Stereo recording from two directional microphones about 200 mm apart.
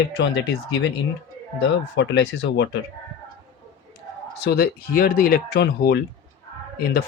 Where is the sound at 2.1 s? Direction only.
65° left (ahead or behind).